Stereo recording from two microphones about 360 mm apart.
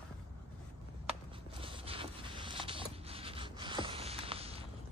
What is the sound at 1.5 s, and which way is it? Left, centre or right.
Zipper, centre.